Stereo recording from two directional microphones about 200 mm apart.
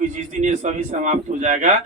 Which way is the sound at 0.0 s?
40° right (ahead or behind).